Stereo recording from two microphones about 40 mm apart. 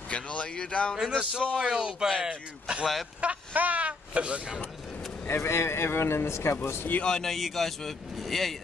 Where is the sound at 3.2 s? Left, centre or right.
Right.